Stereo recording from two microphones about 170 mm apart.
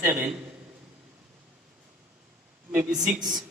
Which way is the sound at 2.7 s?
20° right (ahead or behind).